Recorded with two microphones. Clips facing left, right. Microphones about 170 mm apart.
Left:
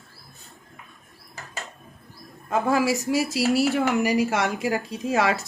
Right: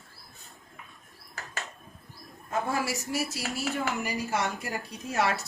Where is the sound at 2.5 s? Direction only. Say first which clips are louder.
Left 8 dB; 90° left.